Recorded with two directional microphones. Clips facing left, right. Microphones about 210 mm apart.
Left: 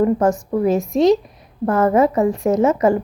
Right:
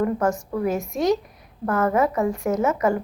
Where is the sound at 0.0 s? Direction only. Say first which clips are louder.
Left 6 dB; 25° left (ahead or behind).